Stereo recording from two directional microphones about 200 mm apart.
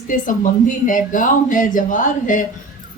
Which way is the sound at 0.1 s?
40° left (ahead or behind).